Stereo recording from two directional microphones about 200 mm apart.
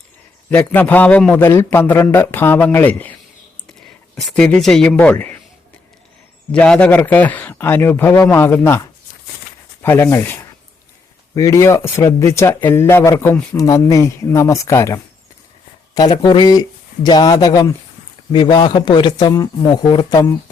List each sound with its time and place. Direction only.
0.5 s speech: 10° left (ahead or behind)
6.5 s speech: 5° left (ahead or behind)